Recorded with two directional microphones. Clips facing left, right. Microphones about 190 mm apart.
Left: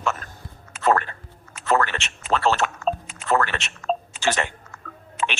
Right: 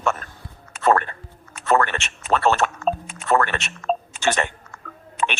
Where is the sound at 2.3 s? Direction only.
50° right (ahead or behind).